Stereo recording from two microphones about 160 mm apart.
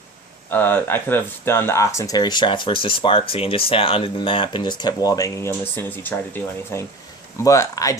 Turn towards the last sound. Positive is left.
turn(degrees=20)  # may be behind; listen again after turning